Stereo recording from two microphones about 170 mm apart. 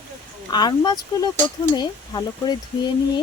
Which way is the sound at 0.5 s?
25° left (ahead or behind).